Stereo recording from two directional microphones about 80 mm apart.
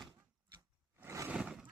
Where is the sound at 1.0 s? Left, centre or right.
Right.